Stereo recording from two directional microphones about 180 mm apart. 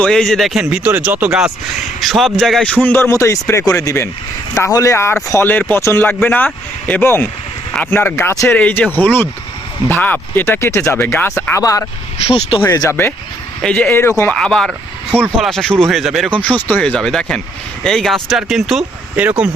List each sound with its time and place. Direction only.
0.0 s speech: 5° left (ahead or behind)
12.3 s speech: 30° left (ahead or behind)
12.6 s speech: 15° left (ahead or behind); by 19.5 s 10° right (ahead or behind)